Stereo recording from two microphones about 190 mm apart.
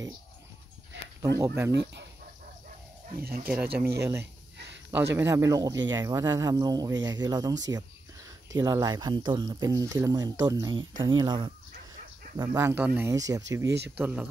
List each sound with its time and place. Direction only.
1.2 s speech: 15° right (ahead or behind)
1.7 s speech: 65° right (ahead or behind)
3.2 s speech: 50° right (ahead or behind)
4.0 s speech: 15° right (ahead or behind)
7.7 s a sound: 15° right (ahead or behind)
8.5 s speech: 20° right (ahead or behind)
12.4 s speech: 15° right (ahead or behind)